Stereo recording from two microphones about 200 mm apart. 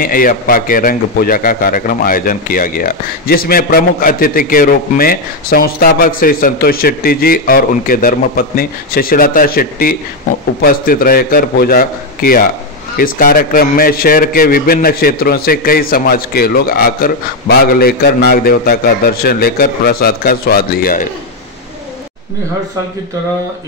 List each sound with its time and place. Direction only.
0.0 s a man's voice: 45° left (ahead or behind)